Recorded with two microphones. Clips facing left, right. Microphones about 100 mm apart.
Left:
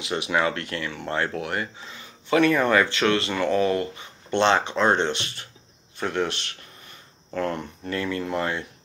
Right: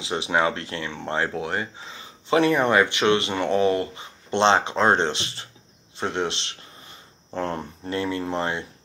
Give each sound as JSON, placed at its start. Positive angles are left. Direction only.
{"t": 0.0, "sound": "speech", "side_deg": -25}